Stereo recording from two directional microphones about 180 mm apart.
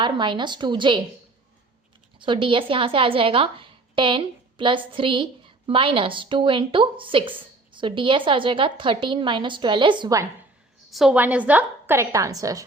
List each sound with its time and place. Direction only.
0.0 s a woman's voice: 25° right (ahead or behind)
2.1 s a woman's voice: 25° right (ahead or behind)
10.9 s a woman's voice: 5° right (ahead or behind)